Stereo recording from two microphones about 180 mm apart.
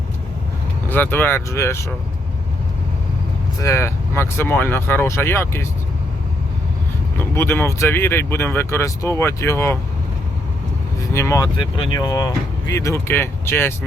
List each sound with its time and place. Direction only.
0.9 s speech: 10° left (ahead or behind)
3.6 s speech: 15° left (ahead or behind)
7.2 s speech: 10° left (ahead or behind)
11.1 s speech: 15° left (ahead or behind)